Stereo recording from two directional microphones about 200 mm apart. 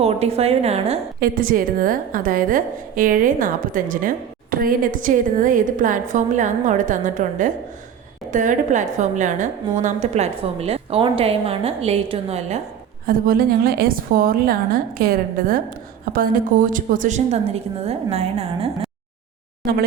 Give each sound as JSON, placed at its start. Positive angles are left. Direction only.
{"t": 0.0, "sound": "a woman's voice", "side_deg": -30}
{"t": 1.2, "sound": "a woman's voice", "side_deg": -45}
{"t": 13.1, "sound": "a woman's voice", "side_deg": -45}